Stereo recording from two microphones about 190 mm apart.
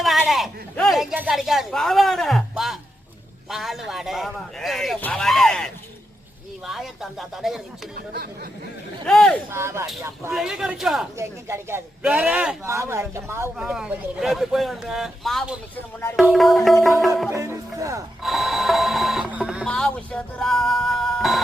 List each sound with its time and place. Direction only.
0.2 s speech: centre (ahead or behind)
9.0 s speech: 5° left (ahead or behind)
9.5 s speech: 15° right (ahead or behind)
10.3 s speech: 5° right (ahead or behind)
11.2 s speech: 15° right (ahead or behind)
13.6 s speech: 5° right (ahead or behind)
17.3 s speech: 15° right (ahead or behind)
18.2 s printer: centre (ahead or behind)
19.3 s a sound: 5° right (ahead or behind)